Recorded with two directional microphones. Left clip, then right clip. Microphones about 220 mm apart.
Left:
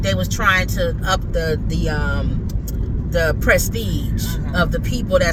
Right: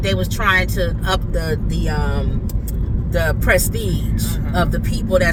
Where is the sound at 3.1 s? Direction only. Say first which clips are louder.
Left 1 dB; 10° left (ahead or behind).